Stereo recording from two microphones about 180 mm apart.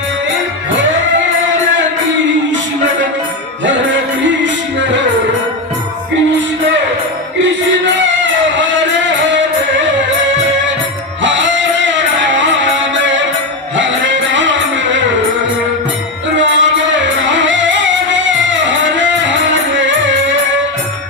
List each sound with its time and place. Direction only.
8.2 s music: 90° right
11.2 s music: 90° right
13.7 s music: 90° right
16.4 s music: 90° right